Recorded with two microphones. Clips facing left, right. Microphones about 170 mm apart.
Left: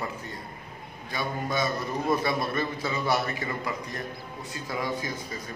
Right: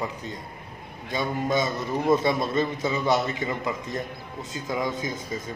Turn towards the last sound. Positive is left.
turn(degrees=-20)  # may be behind; listen again after turning